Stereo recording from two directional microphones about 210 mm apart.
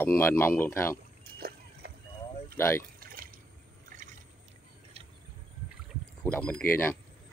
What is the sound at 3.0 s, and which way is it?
Pour, 45° right (ahead or behind).